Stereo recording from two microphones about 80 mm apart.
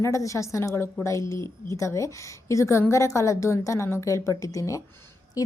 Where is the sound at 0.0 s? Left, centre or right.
Left.